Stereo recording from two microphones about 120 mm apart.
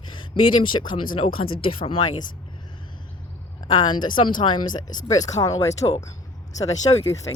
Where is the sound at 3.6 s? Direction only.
40° left (ahead or behind).